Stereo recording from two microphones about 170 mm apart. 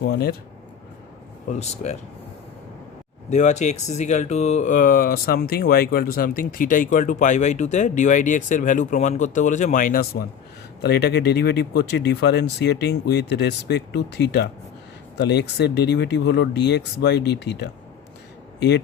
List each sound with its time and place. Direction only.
0.0 s speech: 65° left (ahead or behind)
1.5 s speech: 40° left (ahead or behind)
3.2 s speech: 45° left (ahead or behind); by 10.2 s 60° left (ahead or behind)
10.8 s speech: 75° left (ahead or behind)
15.3 s speech: 85° left